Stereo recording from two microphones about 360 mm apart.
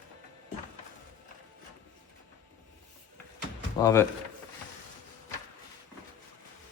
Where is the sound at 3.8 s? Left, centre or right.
Centre.